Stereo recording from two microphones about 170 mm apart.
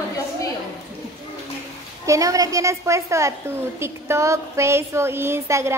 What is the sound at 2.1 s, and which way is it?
A woman's voice, 20° right (ahead or behind).